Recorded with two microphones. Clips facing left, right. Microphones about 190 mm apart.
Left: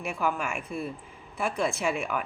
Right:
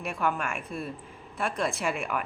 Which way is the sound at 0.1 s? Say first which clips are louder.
Even; 5° left (ahead or behind).